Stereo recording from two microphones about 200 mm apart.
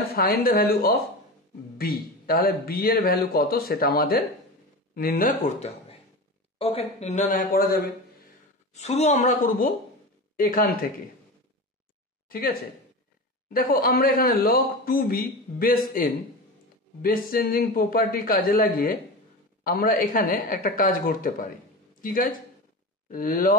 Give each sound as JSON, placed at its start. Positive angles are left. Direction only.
{"t": 0.1, "sound": "a man's voice", "side_deg": 50}
{"t": 5.6, "sound": "a man's voice", "side_deg": 30}
{"t": 8.7, "sound": "a man's voice", "side_deg": 35}
{"t": 12.3, "sound": "a man's voice", "side_deg": 45}